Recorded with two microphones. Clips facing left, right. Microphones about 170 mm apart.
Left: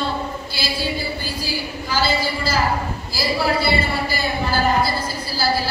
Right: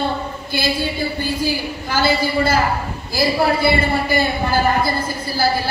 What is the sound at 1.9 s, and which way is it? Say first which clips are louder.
Speech: right 4 dB; 55° right (ahead or behind).